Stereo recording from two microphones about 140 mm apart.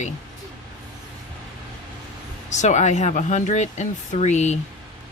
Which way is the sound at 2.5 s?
55° left (ahead or behind).